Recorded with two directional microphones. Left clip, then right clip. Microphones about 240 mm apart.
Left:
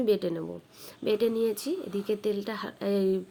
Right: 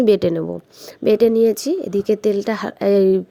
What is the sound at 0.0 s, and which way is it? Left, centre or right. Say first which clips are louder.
A woman's voice: right 12 dB; right.